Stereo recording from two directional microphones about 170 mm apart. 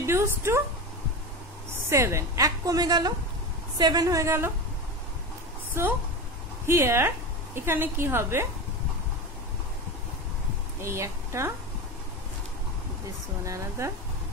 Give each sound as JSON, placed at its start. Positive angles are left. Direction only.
{"t": 0.0, "sound": "a woman's voice", "side_deg": -15}
{"t": 1.9, "sound": "a woman's voice", "side_deg": -15}
{"t": 5.8, "sound": "a woman's voice", "side_deg": -15}
{"t": 10.8, "sound": "speech", "side_deg": -15}
{"t": 13.5, "sound": "a woman's voice", "side_deg": -15}